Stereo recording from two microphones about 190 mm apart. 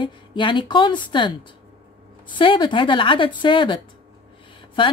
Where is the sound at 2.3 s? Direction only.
25° left (ahead or behind).